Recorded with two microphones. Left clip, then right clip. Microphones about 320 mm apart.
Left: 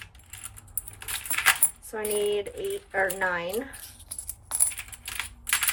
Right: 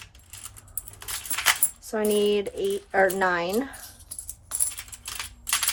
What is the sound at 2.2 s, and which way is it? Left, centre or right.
A woman's voice, centre.